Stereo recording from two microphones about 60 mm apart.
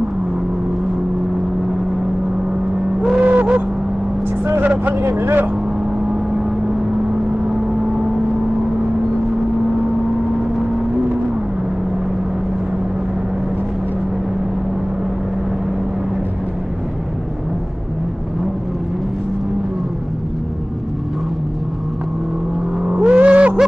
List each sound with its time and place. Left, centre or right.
3.2 s vehicle: right
4.6 s speech: right
22.8 s vehicle: centre